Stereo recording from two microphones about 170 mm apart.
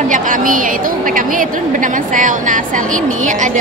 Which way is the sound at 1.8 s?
50° right (ahead or behind).